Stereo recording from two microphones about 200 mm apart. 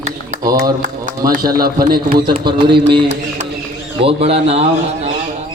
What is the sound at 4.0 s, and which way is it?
A man's voice, 30° right (ahead or behind).